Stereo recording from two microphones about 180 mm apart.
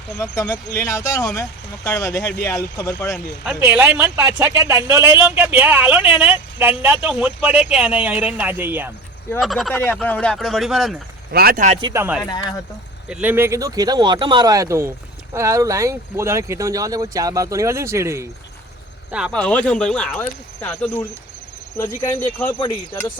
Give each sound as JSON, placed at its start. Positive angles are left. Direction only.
{"t": 0.2, "sound": "speech", "side_deg": 20}
{"t": 3.4, "sound": "speech", "side_deg": -10}
{"t": 9.4, "sound": "speech", "side_deg": 0}
{"t": 11.3, "sound": "speech", "side_deg": -60}
{"t": 11.8, "sound": "speech", "side_deg": -20}
{"t": 13.1, "sound": "speech", "side_deg": -5}
{"t": 19.3, "sound": "speech", "side_deg": 5}
{"t": 22.6, "sound": "speech", "side_deg": 20}